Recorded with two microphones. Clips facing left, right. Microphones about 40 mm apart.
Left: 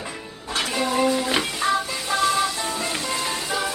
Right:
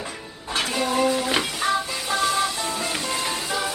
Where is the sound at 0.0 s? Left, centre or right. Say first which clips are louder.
Even; centre.